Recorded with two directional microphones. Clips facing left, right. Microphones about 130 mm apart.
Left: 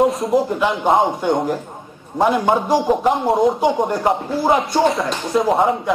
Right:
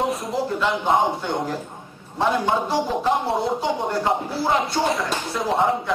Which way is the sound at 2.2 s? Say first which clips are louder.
Left 5 dB; 15° left (ahead or behind).